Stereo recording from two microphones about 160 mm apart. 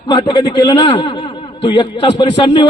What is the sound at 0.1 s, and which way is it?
A man's voice, 25° left (ahead or behind).